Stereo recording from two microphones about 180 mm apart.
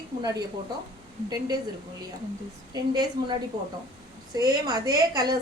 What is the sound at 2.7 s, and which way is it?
Speech, 20° right (ahead or behind).